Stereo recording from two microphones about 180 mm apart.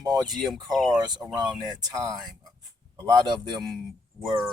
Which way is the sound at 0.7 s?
Centre (ahead or behind).